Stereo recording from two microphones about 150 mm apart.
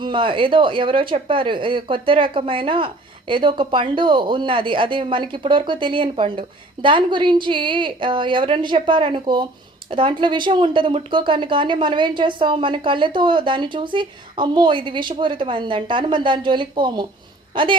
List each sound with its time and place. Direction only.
0.0 s speech: 35° right (ahead or behind)